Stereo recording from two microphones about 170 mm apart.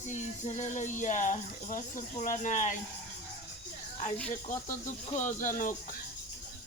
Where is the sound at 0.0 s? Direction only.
45° left (ahead or behind).